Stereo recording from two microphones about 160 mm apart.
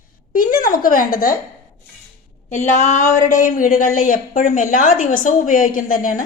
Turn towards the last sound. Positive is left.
turn(degrees=60)  # may be behind; listen again after turning